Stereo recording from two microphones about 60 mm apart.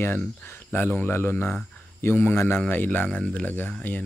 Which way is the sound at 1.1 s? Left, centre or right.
Left.